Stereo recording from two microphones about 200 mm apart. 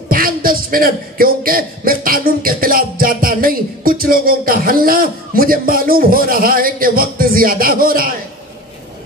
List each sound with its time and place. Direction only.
0.1 s speech: 45° right (ahead or behind)